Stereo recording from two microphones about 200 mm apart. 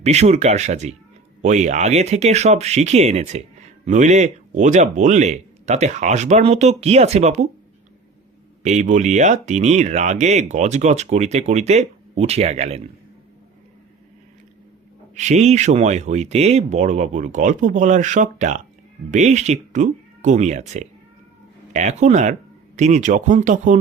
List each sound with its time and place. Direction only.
0.0 s speech: 35° right (ahead or behind)
8.6 s speech: 35° right (ahead or behind)
15.1 s speech: 35° right (ahead or behind)